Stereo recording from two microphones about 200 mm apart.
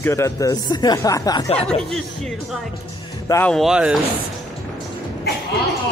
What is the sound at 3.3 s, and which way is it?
Speech, 10° left (ahead or behind).